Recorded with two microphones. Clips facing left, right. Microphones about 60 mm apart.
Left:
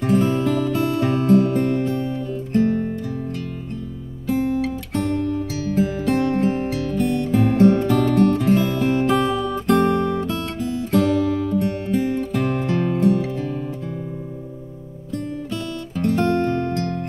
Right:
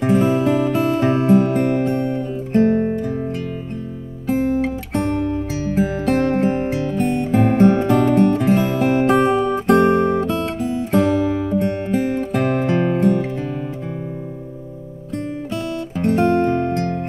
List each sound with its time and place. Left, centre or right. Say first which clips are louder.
0.0 s music: right 3 dB; right
2.0 s music: right 3 dB; right
4.3 s music: right 2 dB; right
9.2 s guitar: right 5 dB; right
10.2 s guitar: right 4 dB; centre
10.7 s music: right 1 dB; right
16.2 s music: right 4 dB; centre